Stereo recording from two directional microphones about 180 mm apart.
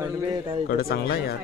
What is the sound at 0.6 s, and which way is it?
Speech, 60° left (ahead or behind).